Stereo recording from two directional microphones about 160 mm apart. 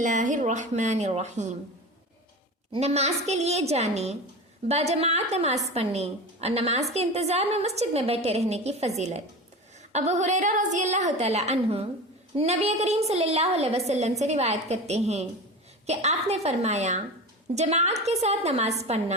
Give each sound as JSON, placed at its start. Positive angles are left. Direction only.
{"t": 0.0, "sound": "a woman's voice", "side_deg": -50}
{"t": 2.7, "sound": "a woman's voice", "side_deg": -40}